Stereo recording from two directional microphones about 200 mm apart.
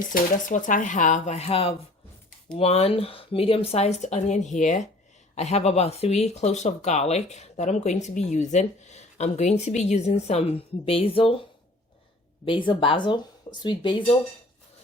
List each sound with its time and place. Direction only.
0.1 s speech: 40° left (ahead or behind)
12.5 s speech: 25° left (ahead or behind)